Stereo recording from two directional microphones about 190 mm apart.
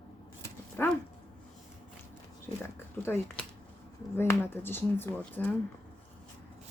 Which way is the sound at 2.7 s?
10° left (ahead or behind).